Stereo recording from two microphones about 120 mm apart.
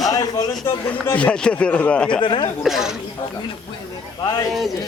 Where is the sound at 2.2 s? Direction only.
40° left (ahead or behind).